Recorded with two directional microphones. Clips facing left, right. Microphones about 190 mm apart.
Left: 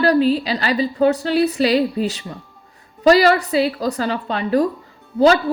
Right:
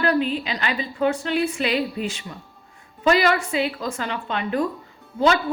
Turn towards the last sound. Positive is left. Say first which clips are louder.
# left 6 dB
turn(degrees=35)  # may be behind; listen again after turning